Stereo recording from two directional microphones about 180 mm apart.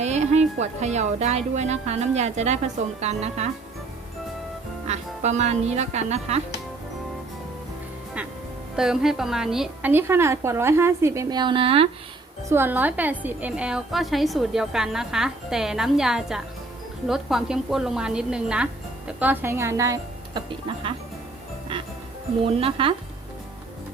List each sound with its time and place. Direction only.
0.0 s a woman's voice: 40° right (ahead or behind)
4.9 s speech: 40° right (ahead or behind)
8.7 s a woman's voice: 5° right (ahead or behind); by 11.9 s 30° right (ahead or behind)
12.5 s a woman's voice: 10° right (ahead or behind)
22.6 s speech: 30° right (ahead or behind)